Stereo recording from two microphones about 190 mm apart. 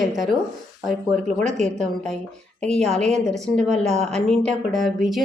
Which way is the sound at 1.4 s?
40° right (ahead or behind).